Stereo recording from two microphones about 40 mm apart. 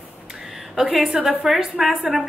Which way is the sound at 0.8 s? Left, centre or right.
Centre.